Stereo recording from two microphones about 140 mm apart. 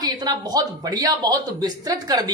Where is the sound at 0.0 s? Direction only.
30° right (ahead or behind).